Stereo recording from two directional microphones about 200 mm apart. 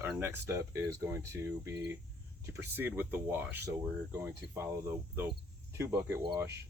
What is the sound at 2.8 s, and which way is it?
Speech, 10° right (ahead or behind).